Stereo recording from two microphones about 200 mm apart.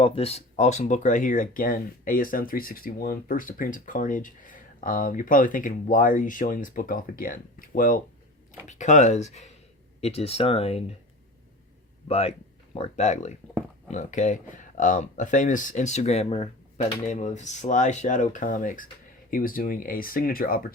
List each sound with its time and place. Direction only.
0.0 s speech: 30° left (ahead or behind)
12.0 s speech: 30° left (ahead or behind); by 20.7 s 45° left (ahead or behind)